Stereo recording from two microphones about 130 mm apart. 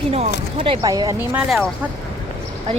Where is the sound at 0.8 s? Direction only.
30° right (ahead or behind).